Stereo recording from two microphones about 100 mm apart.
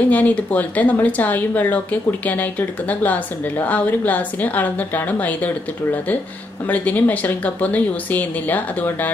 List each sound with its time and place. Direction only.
0.1 s speech: 15° left (ahead or behind)